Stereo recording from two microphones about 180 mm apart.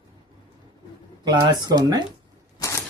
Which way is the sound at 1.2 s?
25° right (ahead or behind).